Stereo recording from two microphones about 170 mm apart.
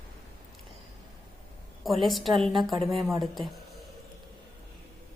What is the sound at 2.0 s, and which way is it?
A woman's voice, centre (ahead or behind).